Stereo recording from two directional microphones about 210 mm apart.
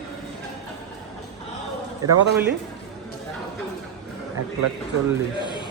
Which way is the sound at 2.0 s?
15° right (ahead or behind).